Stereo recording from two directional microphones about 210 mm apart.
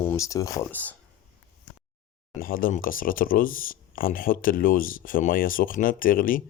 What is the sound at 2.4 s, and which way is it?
Speech, 40° left (ahead or behind).